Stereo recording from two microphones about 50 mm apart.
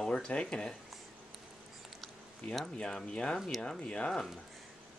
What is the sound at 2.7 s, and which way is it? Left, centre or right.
Speech, centre.